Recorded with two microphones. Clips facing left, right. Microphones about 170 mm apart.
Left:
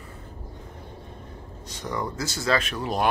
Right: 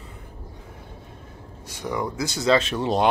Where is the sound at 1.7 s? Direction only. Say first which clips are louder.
Right 3 dB; 10° right (ahead or behind); by 3.1 s 25° right (ahead or behind).